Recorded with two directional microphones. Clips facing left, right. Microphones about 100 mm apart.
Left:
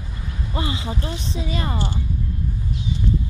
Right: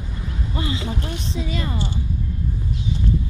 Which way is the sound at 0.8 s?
25° left (ahead or behind).